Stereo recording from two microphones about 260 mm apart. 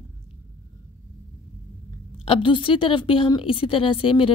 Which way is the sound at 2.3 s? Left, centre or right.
Centre.